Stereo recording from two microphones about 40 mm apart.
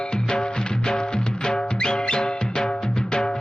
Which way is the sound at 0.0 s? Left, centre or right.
Left.